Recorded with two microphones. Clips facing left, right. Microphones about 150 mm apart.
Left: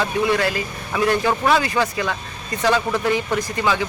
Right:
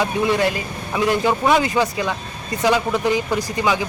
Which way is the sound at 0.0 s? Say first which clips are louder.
Right 1 dB; 20° right (ahead or behind).